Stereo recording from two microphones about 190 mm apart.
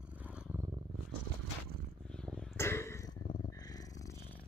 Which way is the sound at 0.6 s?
25° right (ahead or behind).